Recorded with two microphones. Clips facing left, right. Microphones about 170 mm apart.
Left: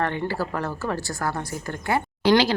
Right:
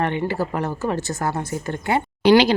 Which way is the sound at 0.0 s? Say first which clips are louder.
Right 3 dB; 20° right (ahead or behind).